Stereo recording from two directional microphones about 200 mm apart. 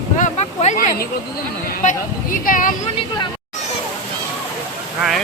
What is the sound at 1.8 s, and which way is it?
Speech, 40° left (ahead or behind).